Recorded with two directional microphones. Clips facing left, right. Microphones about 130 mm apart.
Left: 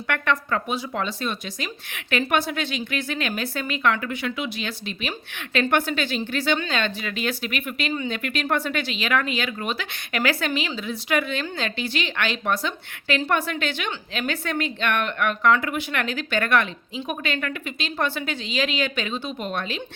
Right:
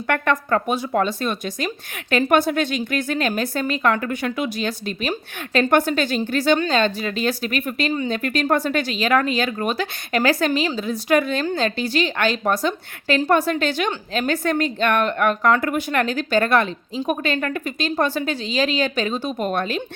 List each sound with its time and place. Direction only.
0.1 s a woman's voice: 45° right (ahead or behind)